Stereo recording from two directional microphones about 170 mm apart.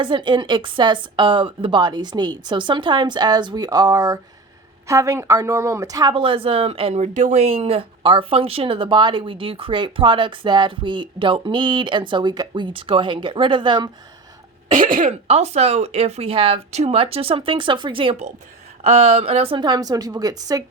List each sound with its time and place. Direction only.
0.0 s speech: 30° right (ahead or behind)
14.8 s speech: 55° right (ahead or behind)
15.3 s speech: 40° right (ahead or behind); by 20.7 s 20° right (ahead or behind)